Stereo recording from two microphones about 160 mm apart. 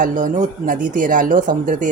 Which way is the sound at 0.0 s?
55° right (ahead or behind).